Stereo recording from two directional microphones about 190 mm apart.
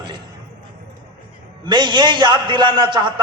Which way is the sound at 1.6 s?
25° right (ahead or behind).